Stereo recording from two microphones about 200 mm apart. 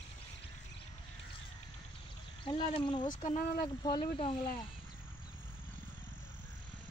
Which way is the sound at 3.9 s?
25° left (ahead or behind).